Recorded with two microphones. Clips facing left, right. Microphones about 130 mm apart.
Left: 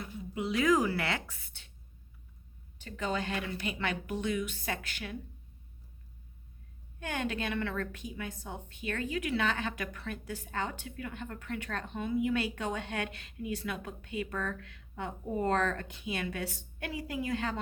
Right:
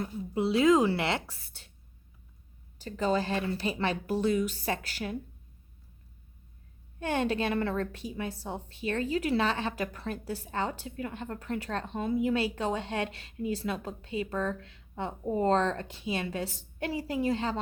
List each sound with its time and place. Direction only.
0.0 s speech: 35° right (ahead or behind)
2.7 s a woman's voice: 35° right (ahead or behind)
7.0 s a woman's voice: 35° right (ahead or behind)